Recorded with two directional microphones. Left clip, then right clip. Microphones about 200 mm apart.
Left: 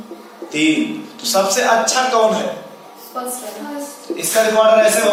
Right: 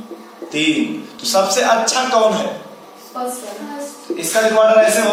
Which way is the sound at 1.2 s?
15° right (ahead or behind).